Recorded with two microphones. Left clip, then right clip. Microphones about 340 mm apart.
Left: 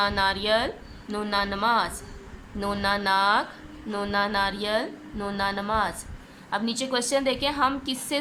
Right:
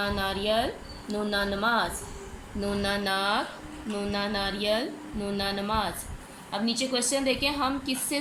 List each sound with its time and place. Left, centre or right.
0.0 s speech: left